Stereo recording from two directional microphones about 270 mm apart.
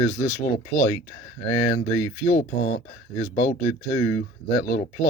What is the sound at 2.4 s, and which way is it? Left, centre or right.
Speech, left.